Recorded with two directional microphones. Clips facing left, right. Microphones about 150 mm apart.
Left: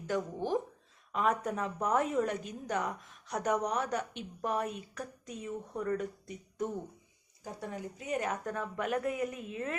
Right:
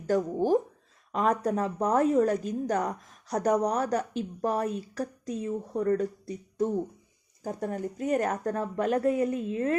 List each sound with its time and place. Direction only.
0.1 s a woman's voice: 40° right (ahead or behind)
7.4 s a woman's voice: 45° right (ahead or behind)